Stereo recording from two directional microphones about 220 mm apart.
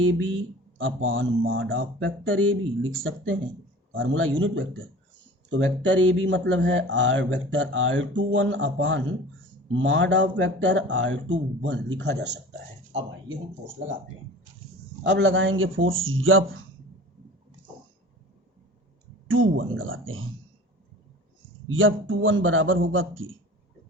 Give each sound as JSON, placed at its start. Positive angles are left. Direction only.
{"t": 0.0, "sound": "speech", "side_deg": -65}
{"t": 15.0, "sound": "speech", "side_deg": -55}
{"t": 19.3, "sound": "speech", "side_deg": -65}
{"t": 21.7, "sound": "speech", "side_deg": -60}